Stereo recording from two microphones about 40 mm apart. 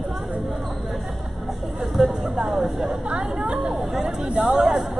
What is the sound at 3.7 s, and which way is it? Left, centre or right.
Chatter, centre.